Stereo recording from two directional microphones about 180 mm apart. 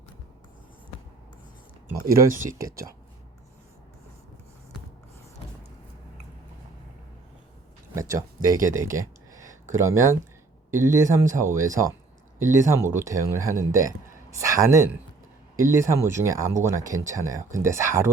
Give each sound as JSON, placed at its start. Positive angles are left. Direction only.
{"t": 2.4, "sound": "speech", "side_deg": -15}
{"t": 7.9, "sound": "speech", "side_deg": -15}